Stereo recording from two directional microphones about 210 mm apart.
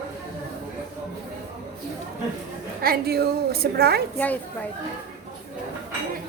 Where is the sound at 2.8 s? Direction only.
45° right (ahead or behind).